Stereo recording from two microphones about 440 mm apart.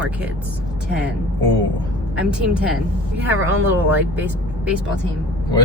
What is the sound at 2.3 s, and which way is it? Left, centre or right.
Speech, centre.